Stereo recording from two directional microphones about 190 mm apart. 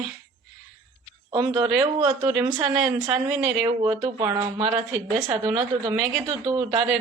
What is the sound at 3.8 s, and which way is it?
Speech, 15° right (ahead or behind).